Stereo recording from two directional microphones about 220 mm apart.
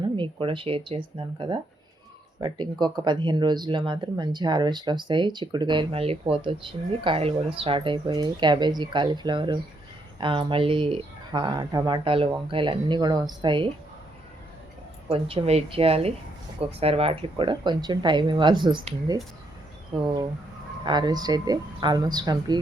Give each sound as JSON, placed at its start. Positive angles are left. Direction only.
{"t": 0.0, "sound": "speech", "side_deg": -25}
{"t": 15.1, "sound": "speech", "side_deg": -25}